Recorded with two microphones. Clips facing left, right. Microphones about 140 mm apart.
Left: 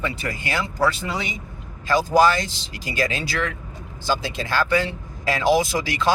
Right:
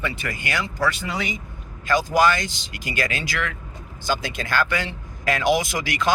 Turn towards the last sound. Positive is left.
turn(degrees=30)  # may be behind; listen again after turning